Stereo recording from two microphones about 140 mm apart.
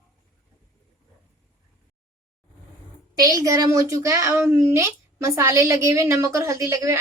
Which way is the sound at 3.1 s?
25° right (ahead or behind).